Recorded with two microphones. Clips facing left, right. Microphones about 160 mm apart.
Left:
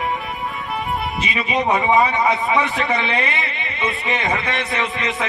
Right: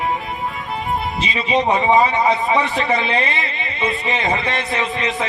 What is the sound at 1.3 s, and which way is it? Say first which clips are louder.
Speech: right 2 dB; 25° right (ahead or behind).